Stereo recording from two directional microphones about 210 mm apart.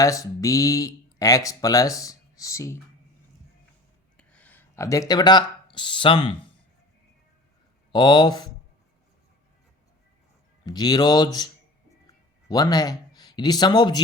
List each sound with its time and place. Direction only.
0.0 s speech: 15° left (ahead or behind)
4.2 s speech: 5° left (ahead or behind); by 6.3 s 25° left (ahead or behind)
7.9 s speech: 20° left (ahead or behind)
10.7 s speech: 20° left (ahead or behind)
12.5 s speech: 20° left (ahead or behind)